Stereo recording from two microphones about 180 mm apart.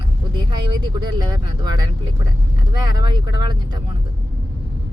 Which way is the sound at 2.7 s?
25° right (ahead or behind).